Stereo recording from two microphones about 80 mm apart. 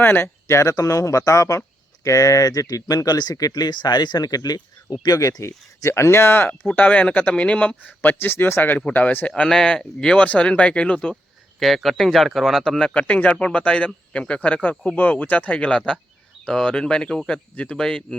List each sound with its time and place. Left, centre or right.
0.0 s speech: left
0.4 s speech: left; by 11.2 s centre
11.6 s speech: centre